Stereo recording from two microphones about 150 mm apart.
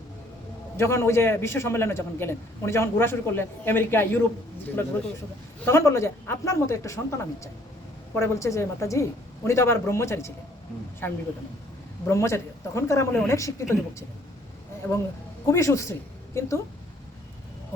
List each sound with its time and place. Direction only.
0.8 s a man's voice: 15° left (ahead or behind)
5.6 s a man's voice: 20° left (ahead or behind)
14.8 s a man's voice: 10° left (ahead or behind)